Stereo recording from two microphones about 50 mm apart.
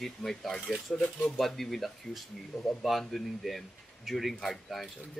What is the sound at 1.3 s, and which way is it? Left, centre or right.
Speech, centre.